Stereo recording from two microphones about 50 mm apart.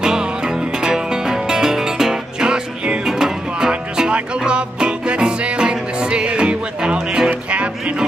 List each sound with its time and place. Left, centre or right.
0.0 s music: centre